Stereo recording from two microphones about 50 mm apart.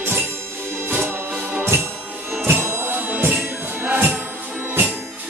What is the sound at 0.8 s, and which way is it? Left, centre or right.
Music, right.